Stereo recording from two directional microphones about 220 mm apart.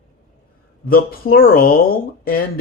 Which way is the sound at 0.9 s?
40° left (ahead or behind).